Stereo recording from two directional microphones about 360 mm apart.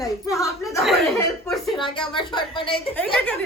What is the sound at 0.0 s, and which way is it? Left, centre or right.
Chuckle, centre.